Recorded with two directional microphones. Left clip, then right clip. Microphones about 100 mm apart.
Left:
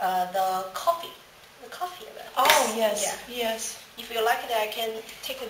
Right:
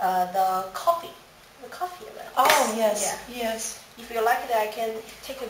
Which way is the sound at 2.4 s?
Centre (ahead or behind).